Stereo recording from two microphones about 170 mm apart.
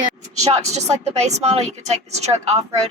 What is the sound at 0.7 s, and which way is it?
Speech, 40° right (ahead or behind).